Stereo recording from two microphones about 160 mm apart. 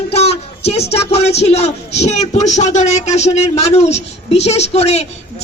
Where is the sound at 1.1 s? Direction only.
40° left (ahead or behind).